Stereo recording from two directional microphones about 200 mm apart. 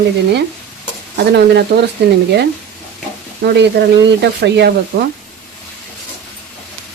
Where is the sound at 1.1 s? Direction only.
60° right (ahead or behind).